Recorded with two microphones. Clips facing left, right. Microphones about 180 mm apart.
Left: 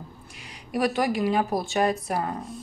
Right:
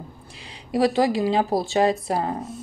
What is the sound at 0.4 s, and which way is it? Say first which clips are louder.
Speech: right 5 dB; 30° right (ahead or behind).